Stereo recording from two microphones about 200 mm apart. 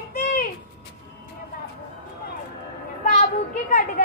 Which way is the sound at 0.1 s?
45° left (ahead or behind).